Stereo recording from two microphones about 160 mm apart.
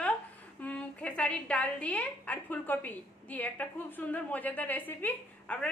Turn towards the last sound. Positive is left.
turn(degrees=10)  # may be behind; listen again after turning